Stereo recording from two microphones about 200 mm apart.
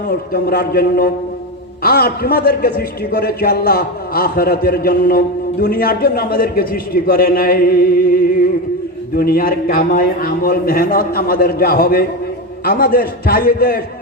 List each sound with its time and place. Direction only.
0.1 s a man's voice: 50° left (ahead or behind)